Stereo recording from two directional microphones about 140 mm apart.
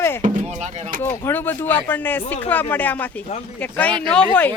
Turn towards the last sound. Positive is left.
turn(degrees=10)  # may be behind; listen again after turning